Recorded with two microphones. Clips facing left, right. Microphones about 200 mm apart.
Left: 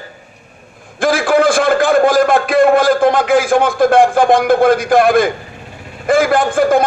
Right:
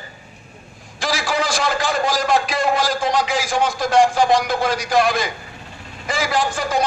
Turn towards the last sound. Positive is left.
turn(degrees=55)  # may be behind; listen again after turning